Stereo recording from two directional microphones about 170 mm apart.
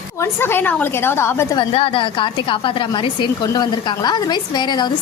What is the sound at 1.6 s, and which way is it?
A woman's voice, 30° left (ahead or behind).